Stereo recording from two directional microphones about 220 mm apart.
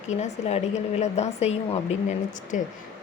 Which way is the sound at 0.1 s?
30° left (ahead or behind).